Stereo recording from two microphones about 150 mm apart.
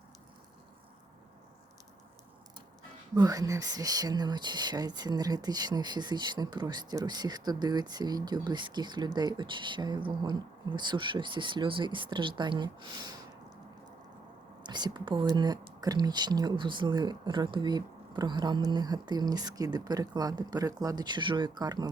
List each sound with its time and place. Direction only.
3.2 s speech: 25° right (ahead or behind)
14.6 s speech: 30° right (ahead or behind)